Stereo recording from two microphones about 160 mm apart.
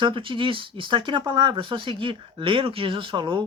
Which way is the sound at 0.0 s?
30° right (ahead or behind).